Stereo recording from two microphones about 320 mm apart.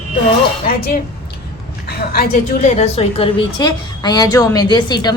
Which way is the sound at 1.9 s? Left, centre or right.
Left.